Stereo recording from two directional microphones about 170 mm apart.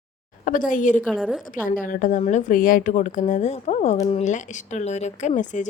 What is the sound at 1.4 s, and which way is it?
A woman's voice, 55° left (ahead or behind).